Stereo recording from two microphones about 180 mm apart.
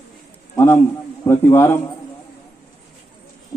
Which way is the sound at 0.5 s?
15° left (ahead or behind).